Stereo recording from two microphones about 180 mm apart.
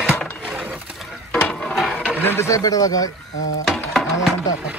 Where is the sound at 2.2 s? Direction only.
15° left (ahead or behind).